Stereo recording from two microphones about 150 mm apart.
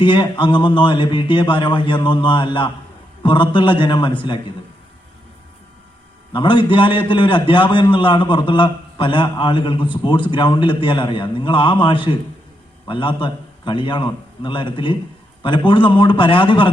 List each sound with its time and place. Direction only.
0.0 s a man's voice: 30° left (ahead or behind)
6.3 s a man's voice: 30° left (ahead or behind)